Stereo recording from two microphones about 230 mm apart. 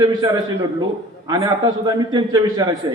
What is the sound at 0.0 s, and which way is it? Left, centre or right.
Speech, centre.